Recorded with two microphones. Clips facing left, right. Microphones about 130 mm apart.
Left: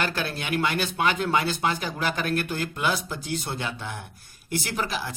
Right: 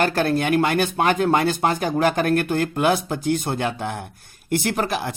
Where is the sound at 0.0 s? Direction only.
45° right (ahead or behind).